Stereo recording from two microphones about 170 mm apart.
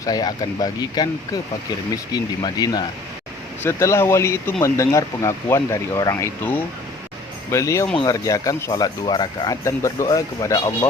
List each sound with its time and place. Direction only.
0.0 s speech: 25° left (ahead or behind)